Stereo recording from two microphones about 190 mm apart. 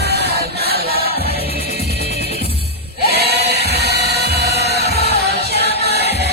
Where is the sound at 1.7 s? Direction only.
60° right (ahead or behind).